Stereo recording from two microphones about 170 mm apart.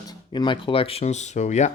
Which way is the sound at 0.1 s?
25° left (ahead or behind).